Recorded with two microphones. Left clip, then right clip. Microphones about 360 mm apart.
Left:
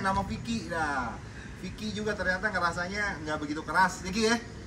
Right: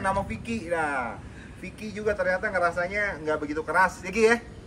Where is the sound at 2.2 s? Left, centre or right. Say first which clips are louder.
Right 3 dB; centre.